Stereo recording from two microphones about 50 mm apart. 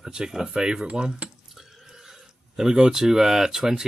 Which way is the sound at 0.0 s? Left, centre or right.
Centre.